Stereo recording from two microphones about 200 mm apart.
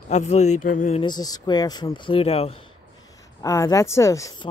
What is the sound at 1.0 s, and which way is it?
Speech, 20° left (ahead or behind).